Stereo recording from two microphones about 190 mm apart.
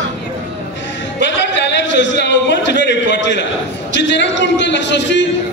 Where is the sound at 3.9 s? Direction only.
70° left (ahead or behind).